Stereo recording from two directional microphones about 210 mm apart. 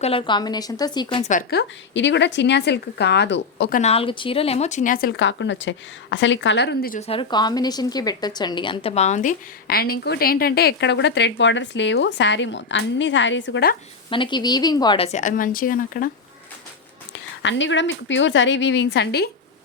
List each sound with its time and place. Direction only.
0.0 s a woman's voice: 25° left (ahead or behind)
1.2 s speech: 40° left (ahead or behind); by 3.8 s 55° left (ahead or behind)
3.8 s a woman's voice: 30° left (ahead or behind); by 7.0 s 45° left (ahead or behind)
7.1 s a woman's voice: 20° left (ahead or behind); by 13.7 s 60° left (ahead or behind)
14.1 s a woman's voice: 20° left (ahead or behind); by 16.0 s 40° left (ahead or behind)
17.4 s speech: 60° left (ahead or behind)